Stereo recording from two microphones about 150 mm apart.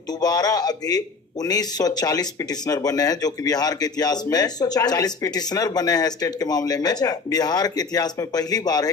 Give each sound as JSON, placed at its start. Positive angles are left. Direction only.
{"t": 0.2, "sound": "a man's voice", "side_deg": 25}